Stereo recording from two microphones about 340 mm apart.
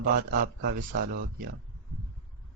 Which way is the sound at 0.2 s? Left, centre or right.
Right.